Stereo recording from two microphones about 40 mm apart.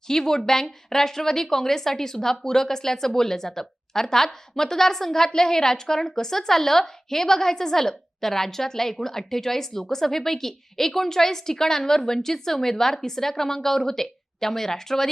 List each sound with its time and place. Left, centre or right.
0.1 s speech: centre